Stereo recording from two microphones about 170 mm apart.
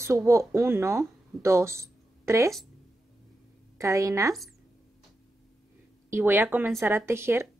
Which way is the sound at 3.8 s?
20° right (ahead or behind).